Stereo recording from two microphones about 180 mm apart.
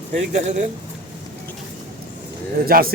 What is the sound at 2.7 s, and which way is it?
Speech, 55° right (ahead or behind).